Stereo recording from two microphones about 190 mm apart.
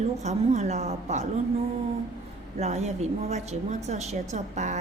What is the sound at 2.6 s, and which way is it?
A woman's voice, 35° right (ahead or behind).